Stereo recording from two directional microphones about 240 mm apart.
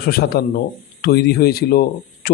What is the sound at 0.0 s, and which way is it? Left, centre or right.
Speech, left.